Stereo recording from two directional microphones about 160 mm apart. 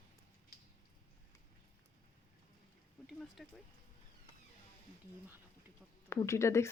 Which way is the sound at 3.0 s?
Centre (ahead or behind).